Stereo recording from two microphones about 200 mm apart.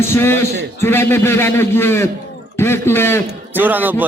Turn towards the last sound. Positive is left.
turn(degrees=-10)  # may be behind; listen again after turning